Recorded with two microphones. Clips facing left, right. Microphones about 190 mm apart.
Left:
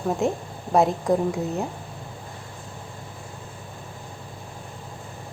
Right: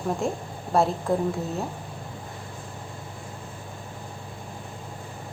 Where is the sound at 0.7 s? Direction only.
15° left (ahead or behind).